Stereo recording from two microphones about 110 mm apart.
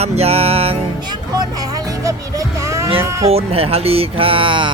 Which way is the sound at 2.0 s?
30° right (ahead or behind).